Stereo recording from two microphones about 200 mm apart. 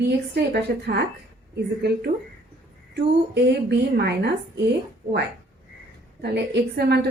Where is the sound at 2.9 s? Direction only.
55° right (ahead or behind).